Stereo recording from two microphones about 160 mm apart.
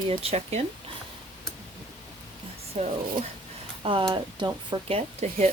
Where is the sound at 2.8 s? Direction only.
40° right (ahead or behind).